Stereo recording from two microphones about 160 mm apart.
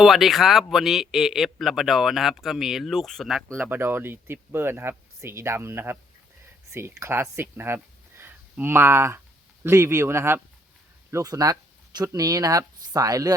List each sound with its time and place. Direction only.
0.0 s speech: centre (ahead or behind)
3.7 s speech: 15° right (ahead or behind)